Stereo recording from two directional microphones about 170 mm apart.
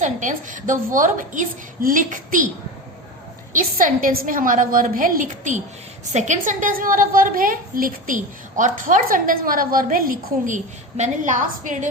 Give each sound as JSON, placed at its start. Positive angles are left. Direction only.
{"t": 0.0, "sound": "a woman's voice", "side_deg": -50}
{"t": 3.5, "sound": "a woman's voice", "side_deg": -50}